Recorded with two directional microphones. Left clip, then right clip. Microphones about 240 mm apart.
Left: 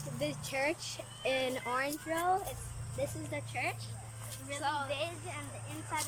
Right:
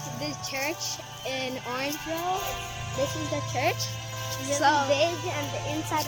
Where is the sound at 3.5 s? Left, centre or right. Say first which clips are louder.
Right 11 dB; right.